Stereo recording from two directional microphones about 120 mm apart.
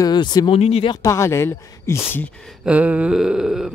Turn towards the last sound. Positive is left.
turn(degrees=-5)  # may be behind; listen again after turning